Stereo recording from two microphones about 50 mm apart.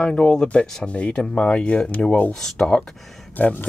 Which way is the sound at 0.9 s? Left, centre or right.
Left.